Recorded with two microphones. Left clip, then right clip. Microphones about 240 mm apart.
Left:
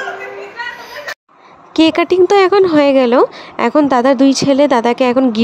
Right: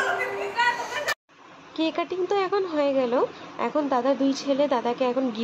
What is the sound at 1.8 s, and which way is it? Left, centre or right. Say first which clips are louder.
Speech: left 16 dB; left.